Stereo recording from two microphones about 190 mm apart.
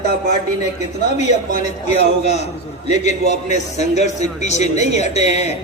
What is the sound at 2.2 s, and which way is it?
A man's voice, 35° left (ahead or behind).